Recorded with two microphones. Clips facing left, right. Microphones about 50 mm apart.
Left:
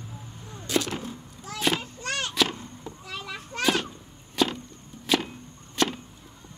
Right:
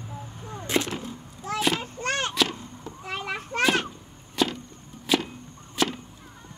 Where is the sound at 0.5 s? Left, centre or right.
Right.